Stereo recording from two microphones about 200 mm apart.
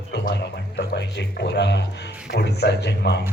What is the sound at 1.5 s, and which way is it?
A man's voice, 60° left (ahead or behind).